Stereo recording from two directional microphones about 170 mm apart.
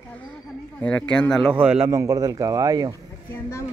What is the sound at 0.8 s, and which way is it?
Speech, 5° left (ahead or behind).